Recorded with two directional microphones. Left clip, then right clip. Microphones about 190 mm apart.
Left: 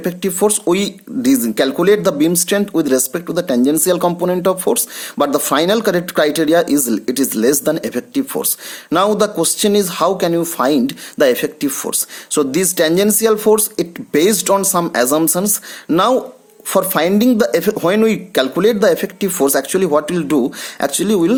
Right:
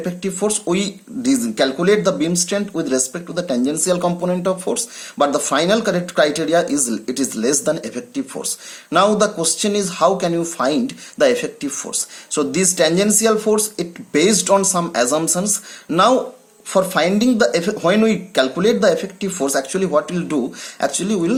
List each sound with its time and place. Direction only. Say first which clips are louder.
0.0 s speech: left 5 dB; 55° left (ahead or behind)